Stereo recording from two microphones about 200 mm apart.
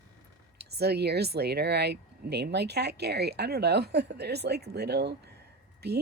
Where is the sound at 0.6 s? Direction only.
55° right (ahead or behind).